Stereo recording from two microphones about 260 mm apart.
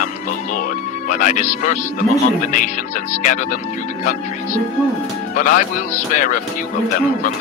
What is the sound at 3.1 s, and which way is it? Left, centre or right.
Speech, left.